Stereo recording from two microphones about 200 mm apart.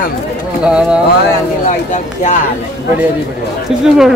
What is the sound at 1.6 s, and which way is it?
Speech, 40° left (ahead or behind).